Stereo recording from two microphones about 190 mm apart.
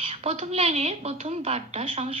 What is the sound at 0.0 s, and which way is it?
A woman's voice, 35° right (ahead or behind).